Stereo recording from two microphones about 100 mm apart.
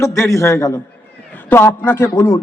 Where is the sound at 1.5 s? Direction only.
20° left (ahead or behind).